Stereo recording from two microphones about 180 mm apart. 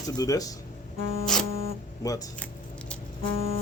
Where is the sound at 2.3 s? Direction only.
5° left (ahead or behind).